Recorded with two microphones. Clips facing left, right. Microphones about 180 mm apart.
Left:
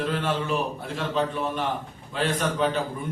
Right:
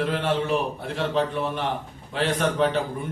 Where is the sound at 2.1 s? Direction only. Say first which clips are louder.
Right 2 dB; 60° right (ahead or behind).